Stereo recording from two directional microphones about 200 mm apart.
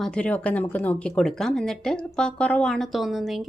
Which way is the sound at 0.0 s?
5° left (ahead or behind).